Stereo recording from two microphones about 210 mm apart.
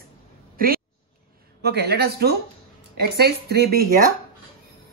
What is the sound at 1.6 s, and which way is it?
Speech, 50° right (ahead or behind).